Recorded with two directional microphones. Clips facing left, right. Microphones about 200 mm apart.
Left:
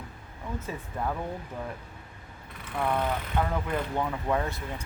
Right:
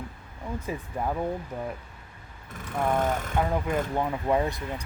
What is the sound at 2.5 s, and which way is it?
Speech, 45° right (ahead or behind).